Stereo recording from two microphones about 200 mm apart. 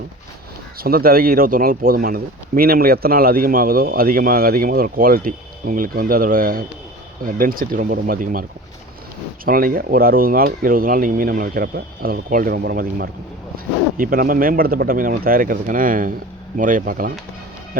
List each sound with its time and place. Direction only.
0.8 s speech: 50° right (ahead or behind)